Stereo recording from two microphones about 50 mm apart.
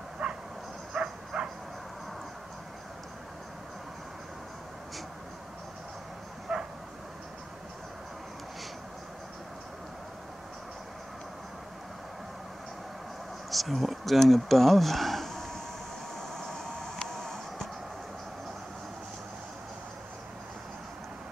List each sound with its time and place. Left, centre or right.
0.2 s dog: centre
0.9 s bow-wow: centre
6.5 s bow-wow: centre
13.5 s speech: centre
16.2 s vehicle: centre